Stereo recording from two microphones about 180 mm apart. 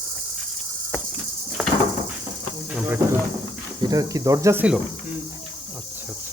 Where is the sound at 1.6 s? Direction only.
5° right (ahead or behind).